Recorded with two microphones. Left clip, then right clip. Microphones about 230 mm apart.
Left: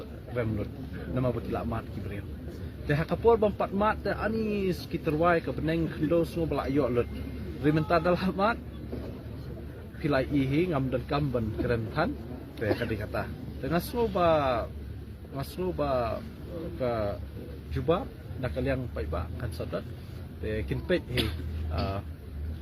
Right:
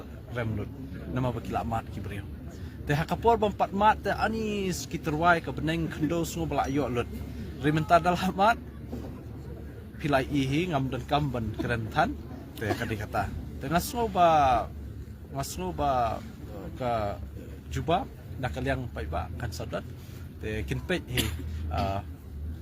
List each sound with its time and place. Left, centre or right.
1.1 s a man's voice: right
10.0 s a man's voice: centre
18.4 s a man's voice: right